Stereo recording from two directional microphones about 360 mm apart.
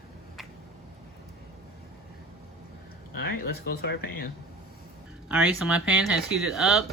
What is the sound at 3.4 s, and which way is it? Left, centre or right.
Speech, left.